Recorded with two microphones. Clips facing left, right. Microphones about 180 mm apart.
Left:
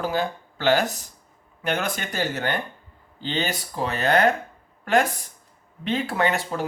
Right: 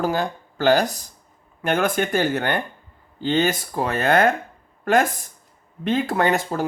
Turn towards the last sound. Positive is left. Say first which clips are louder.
# right 3 dB
turn(degrees=-45)  # may be behind; listen again after turning